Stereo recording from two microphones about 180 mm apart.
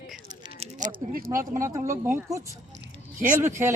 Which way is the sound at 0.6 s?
35° right (ahead or behind).